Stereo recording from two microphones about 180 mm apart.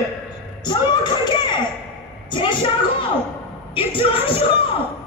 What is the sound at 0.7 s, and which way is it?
A woman's voice, 25° left (ahead or behind).